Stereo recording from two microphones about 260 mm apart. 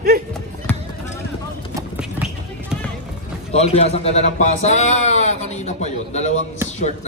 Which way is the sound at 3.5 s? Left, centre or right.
Left.